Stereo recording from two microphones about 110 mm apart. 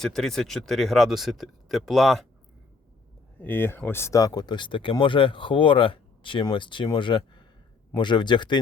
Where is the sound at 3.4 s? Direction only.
20° left (ahead or behind).